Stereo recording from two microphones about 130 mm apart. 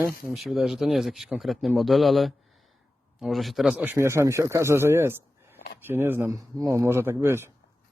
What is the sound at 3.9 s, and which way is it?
Speech, 20° right (ahead or behind).